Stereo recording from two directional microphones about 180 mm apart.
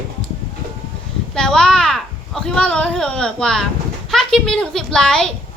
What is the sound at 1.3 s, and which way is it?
A woman's voice, 5° left (ahead or behind).